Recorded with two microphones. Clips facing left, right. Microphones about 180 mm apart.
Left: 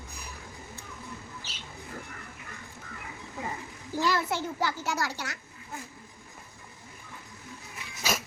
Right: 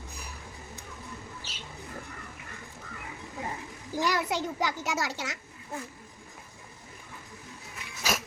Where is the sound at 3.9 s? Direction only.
15° right (ahead or behind).